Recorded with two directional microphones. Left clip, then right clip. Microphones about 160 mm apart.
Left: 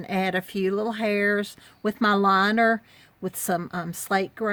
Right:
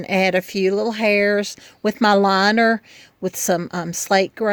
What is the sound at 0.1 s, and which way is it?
A woman's voice, 35° right (ahead or behind).